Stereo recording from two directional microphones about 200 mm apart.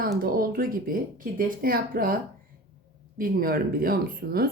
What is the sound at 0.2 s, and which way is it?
Speech, 45° right (ahead or behind).